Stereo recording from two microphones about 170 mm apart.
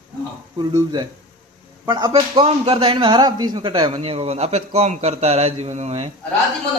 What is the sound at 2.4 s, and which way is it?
Speech, 35° right (ahead or behind).